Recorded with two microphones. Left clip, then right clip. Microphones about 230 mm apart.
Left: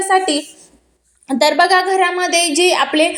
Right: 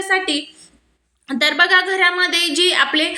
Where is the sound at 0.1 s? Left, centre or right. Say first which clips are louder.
Left 3 dB; centre.